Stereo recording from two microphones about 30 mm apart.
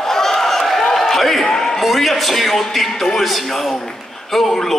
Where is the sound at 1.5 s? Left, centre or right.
Centre.